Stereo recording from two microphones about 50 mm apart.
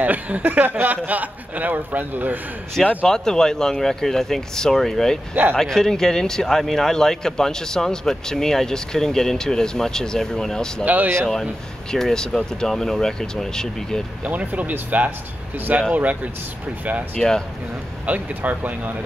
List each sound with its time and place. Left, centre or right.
0.0 s speech: right
2.8 s speech: centre
3.1 s speech: centre
5.3 s speech: right
5.6 s speech: centre
10.9 s speech: right
11.9 s speech: centre
14.2 s speech: right
17.2 s speech: centre
18.0 s speech: right